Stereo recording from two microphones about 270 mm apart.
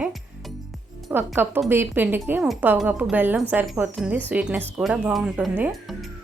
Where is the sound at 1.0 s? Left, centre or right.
Centre.